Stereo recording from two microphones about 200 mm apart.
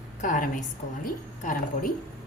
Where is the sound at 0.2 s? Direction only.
40° left (ahead or behind).